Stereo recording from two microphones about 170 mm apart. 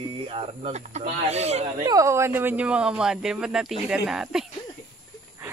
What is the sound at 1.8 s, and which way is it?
Speech, 20° right (ahead or behind).